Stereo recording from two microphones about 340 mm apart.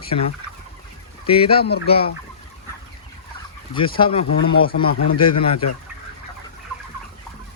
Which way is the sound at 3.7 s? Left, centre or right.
Centre.